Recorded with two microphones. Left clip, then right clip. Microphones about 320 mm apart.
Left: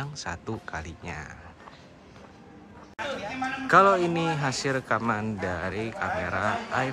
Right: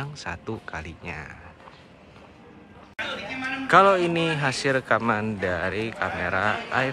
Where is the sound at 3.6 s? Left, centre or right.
Centre.